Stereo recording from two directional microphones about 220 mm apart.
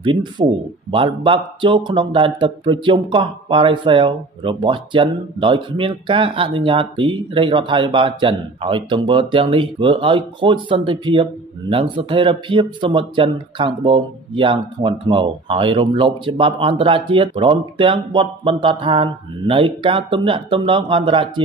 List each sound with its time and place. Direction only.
0.0 s speech: 20° right (ahead or behind)